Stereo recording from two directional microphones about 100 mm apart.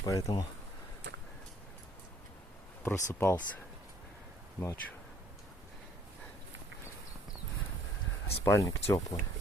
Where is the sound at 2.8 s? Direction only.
30° left (ahead or behind).